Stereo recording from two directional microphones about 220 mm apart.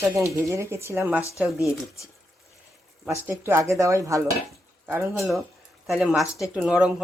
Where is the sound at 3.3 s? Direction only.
10° right (ahead or behind).